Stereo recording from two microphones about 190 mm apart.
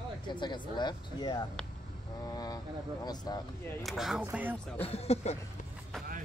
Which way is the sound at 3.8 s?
Centre (ahead or behind).